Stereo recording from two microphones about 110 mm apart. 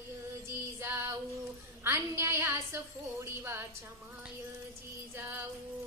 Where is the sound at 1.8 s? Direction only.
25° right (ahead or behind).